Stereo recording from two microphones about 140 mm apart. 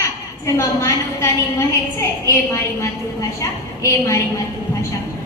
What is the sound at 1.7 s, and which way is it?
A woman's voice, 20° left (ahead or behind).